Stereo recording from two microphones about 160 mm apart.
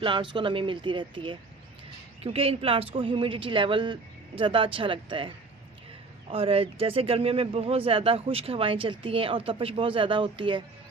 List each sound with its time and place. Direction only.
0.0 s speech: 30° right (ahead or behind)
6.3 s speech: 35° right (ahead or behind)